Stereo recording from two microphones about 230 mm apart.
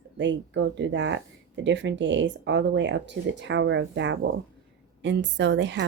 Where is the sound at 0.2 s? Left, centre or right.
Right.